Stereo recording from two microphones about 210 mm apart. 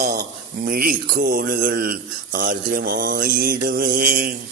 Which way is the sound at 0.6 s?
45° right (ahead or behind).